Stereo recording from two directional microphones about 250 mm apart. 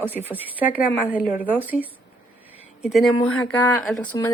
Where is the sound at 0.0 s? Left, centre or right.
Centre.